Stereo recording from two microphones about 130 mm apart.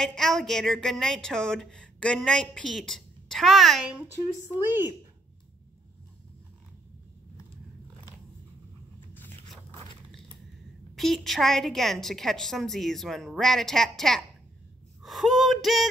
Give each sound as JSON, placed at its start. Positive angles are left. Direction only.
{"t": 0.0, "sound": "a woman's voice", "side_deg": 5}
{"t": 4.6, "sound": "speech", "side_deg": -15}
{"t": 11.0, "sound": "a woman's voice", "side_deg": 0}